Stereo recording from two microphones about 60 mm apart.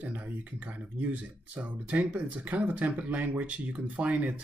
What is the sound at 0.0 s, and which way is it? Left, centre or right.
Speech, right.